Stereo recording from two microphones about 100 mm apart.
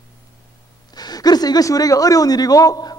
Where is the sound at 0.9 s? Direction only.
40° left (ahead or behind).